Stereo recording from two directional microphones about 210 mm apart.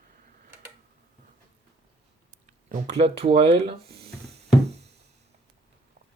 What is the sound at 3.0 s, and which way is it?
Speech, 25° right (ahead or behind).